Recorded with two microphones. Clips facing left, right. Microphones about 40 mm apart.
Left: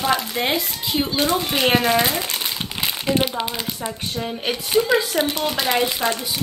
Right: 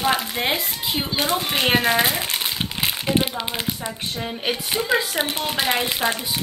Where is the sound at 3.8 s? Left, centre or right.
Centre.